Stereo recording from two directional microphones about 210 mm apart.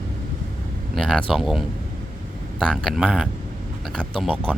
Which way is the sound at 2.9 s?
Centre (ahead or behind).